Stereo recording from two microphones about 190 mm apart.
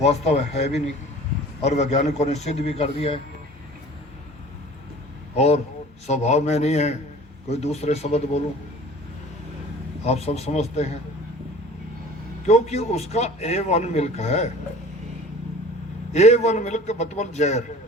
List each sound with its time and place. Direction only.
0.0 s a man's voice: 35° left (ahead or behind)
5.3 s a man's voice: 35° left (ahead or behind)
10.1 s a man's voice: 35° left (ahead or behind)
12.5 s a man's voice: 35° left (ahead or behind)
16.1 s a man's voice: 35° left (ahead or behind)